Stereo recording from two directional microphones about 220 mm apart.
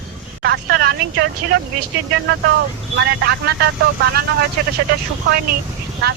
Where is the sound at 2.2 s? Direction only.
50° right (ahead or behind).